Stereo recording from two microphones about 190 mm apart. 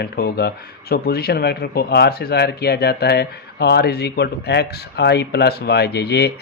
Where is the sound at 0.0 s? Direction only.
60° left (ahead or behind).